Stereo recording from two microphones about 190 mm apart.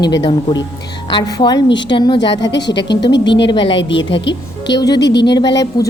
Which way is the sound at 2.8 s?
65° left (ahead or behind).